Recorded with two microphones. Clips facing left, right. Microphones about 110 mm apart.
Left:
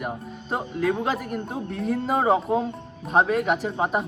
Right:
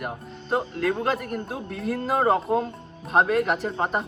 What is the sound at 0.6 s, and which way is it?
Speech, 5° left (ahead or behind).